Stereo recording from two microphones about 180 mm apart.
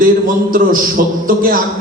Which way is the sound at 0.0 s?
50° right (ahead or behind).